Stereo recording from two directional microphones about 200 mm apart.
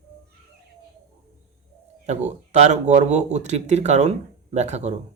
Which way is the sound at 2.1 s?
35° right (ahead or behind).